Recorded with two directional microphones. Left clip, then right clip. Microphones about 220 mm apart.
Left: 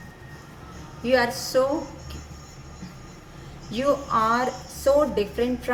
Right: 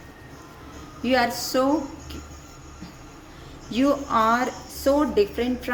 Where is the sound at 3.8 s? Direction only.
45° right (ahead or behind).